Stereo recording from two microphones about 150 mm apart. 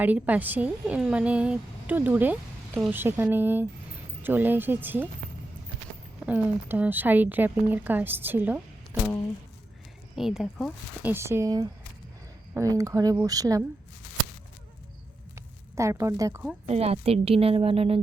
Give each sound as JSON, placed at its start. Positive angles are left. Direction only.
{"t": 0.0, "sound": "a woman's voice", "side_deg": -10}
{"t": 6.2, "sound": "a woman's voice", "side_deg": -10}
{"t": 10.2, "sound": "speech", "side_deg": 0}
{"t": 11.1, "sound": "a woman's voice", "side_deg": -20}
{"t": 15.4, "sound": "speech", "side_deg": -20}
{"t": 16.6, "sound": "a woman's voice", "side_deg": -45}